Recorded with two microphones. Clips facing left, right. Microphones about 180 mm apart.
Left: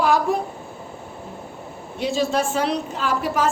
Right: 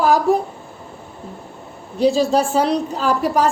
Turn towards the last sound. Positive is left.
turn(degrees=-35)  # may be behind; listen again after turning